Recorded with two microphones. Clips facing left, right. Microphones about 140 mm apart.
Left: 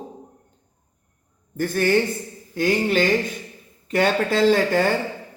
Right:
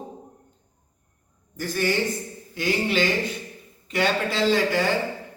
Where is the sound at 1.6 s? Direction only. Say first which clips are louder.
Left 4 dB; 55° left (ahead or behind).